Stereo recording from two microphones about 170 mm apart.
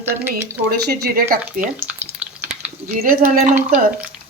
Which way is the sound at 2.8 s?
55° right (ahead or behind).